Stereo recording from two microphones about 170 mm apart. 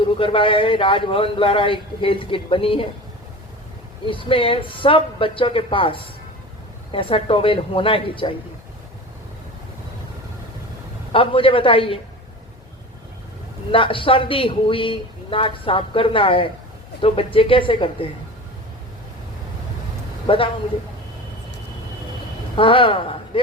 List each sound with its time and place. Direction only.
0.2 s speech: 30° left (ahead or behind)
4.0 s speech: 30° left (ahead or behind)
11.1 s speech: 30° left (ahead or behind)
13.7 s speech: 30° left (ahead or behind)
20.2 s speech: 30° left (ahead or behind)
22.5 s speech: 30° left (ahead or behind)